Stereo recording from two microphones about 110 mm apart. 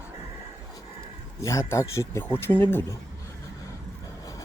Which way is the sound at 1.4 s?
25° left (ahead or behind).